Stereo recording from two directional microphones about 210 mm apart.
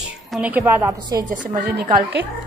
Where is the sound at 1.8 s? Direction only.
55° right (ahead or behind).